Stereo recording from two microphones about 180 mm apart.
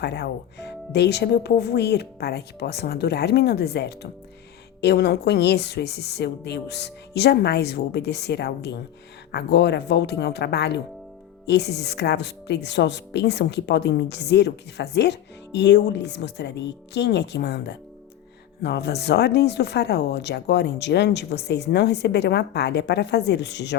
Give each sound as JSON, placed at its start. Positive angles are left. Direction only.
{"t": 0.0, "sound": "speech", "side_deg": 70}